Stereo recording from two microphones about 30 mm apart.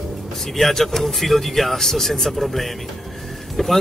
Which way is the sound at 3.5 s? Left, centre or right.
Centre.